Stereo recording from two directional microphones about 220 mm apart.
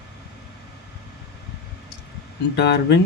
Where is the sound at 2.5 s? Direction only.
50° left (ahead or behind).